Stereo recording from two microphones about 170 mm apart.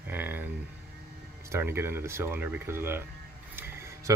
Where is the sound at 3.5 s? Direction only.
15° right (ahead or behind).